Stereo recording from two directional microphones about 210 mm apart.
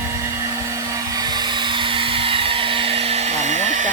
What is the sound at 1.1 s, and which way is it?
Vacuum cleaner, 20° right (ahead or behind).